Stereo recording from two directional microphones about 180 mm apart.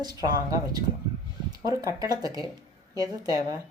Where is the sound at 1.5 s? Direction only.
20° right (ahead or behind).